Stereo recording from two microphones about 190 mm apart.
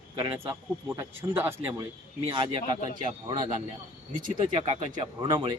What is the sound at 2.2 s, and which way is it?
Speech, 25° right (ahead or behind).